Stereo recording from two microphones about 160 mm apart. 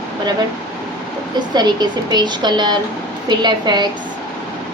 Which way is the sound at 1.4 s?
25° right (ahead or behind).